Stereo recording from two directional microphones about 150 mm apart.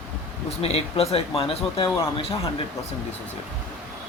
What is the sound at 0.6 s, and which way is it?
Speech, 40° left (ahead or behind).